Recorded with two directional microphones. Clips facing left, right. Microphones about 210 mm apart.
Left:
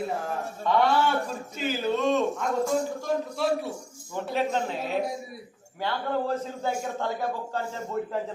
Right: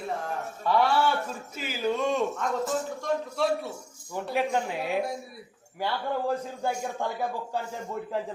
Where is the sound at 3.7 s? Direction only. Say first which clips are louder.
Left 1 dB; 10° right (ahead or behind).